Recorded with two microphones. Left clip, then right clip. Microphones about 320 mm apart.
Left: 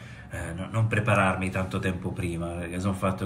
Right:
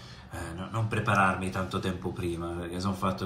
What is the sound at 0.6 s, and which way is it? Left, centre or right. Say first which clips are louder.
A man's voice: left 4 dB; centre.